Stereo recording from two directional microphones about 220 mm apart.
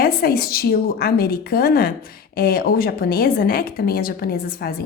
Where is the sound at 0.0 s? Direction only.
45° left (ahead or behind).